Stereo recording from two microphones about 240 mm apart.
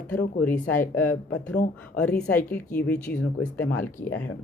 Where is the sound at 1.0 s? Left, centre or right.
Left.